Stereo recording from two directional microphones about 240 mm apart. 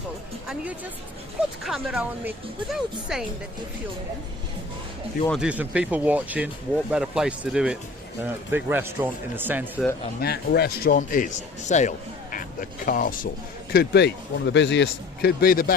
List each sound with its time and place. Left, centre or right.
0.4 s speech: centre
5.3 s speech: centre
10.2 s a man's voice: left